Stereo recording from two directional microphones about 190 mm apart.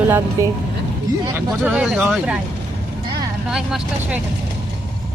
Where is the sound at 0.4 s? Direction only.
15° right (ahead or behind).